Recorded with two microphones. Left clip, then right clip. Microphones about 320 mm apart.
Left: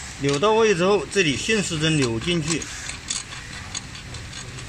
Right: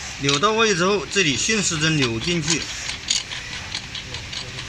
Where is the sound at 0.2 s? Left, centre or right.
Left.